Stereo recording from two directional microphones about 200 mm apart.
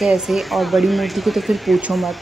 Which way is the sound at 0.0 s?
Centre (ahead or behind).